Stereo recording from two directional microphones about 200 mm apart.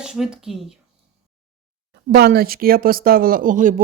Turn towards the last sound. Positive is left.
turn(degrees=-40)  # may be behind; listen again after turning